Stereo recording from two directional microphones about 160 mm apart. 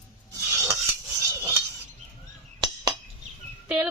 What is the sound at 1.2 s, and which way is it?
Cutlery, 15° right (ahead or behind).